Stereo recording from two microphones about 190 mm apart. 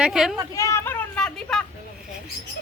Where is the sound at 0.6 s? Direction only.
15° left (ahead or behind).